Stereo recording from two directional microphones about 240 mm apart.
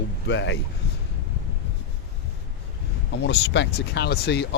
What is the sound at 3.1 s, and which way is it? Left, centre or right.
Speech, left.